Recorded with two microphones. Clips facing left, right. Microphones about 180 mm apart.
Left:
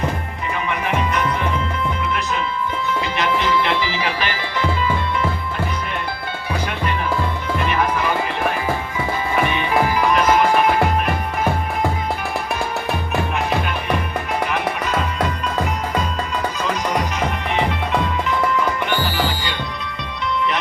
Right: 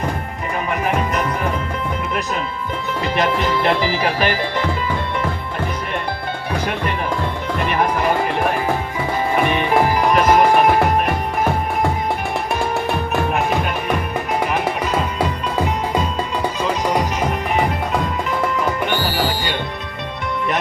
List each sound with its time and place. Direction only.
0.7 s music: 40° right (ahead or behind)
3.0 s music: 40° right (ahead or behind)
7.7 s music: 45° right (ahead or behind)
9.5 s music: 45° right (ahead or behind)